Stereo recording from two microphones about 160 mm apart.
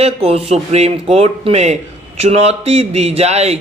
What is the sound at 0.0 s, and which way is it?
A man's voice, 40° right (ahead or behind).